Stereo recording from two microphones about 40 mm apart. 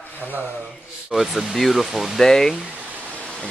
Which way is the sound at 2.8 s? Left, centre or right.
Right.